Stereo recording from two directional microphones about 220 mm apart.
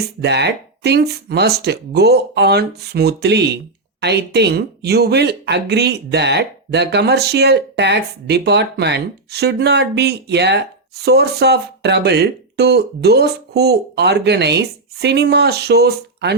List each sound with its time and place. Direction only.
0.2 s speech: 50° right (ahead or behind)